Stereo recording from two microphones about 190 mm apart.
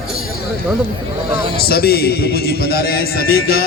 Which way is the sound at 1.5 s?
55° left (ahead or behind).